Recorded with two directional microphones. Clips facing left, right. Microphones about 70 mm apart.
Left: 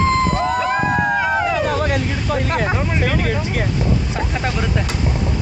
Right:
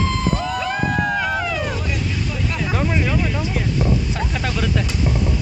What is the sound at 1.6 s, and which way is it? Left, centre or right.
Speech, left.